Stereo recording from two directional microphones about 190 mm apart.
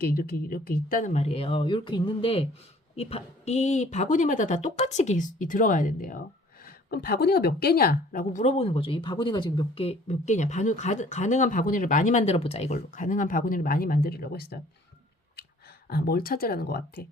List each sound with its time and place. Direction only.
0.0 s a woman's voice: 50° left (ahead or behind)
15.9 s speech: 55° left (ahead or behind)